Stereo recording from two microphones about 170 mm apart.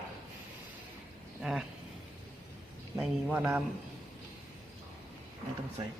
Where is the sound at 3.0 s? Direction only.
5° right (ahead or behind).